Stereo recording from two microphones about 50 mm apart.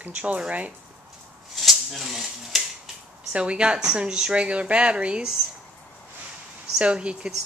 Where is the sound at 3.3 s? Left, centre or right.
Right.